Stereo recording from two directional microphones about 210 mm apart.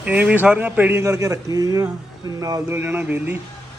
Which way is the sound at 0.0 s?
5° right (ahead or behind).